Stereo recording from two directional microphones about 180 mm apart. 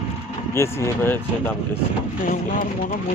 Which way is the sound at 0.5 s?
15° left (ahead or behind).